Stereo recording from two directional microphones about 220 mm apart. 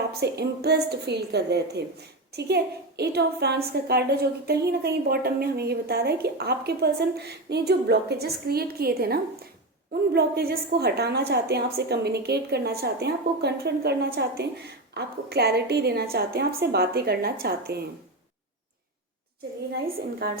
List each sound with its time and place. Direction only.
0.1 s a woman's voice: 45° right (ahead or behind)
20.1 s a woman's voice: 45° right (ahead or behind)